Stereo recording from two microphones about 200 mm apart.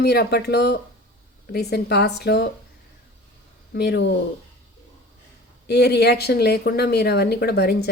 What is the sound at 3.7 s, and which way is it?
Speech, 55° left (ahead or behind).